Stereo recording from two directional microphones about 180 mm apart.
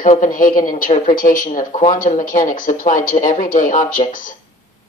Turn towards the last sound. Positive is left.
turn(degrees=45)  # may be behind; listen again after turning